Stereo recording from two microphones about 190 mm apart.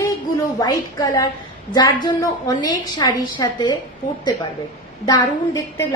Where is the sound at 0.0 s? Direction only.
20° left (ahead or behind).